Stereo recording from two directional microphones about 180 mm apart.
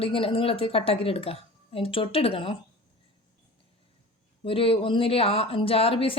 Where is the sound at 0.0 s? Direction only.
30° left (ahead or behind).